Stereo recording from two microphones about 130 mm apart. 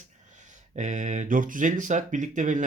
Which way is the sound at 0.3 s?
70° right (ahead or behind).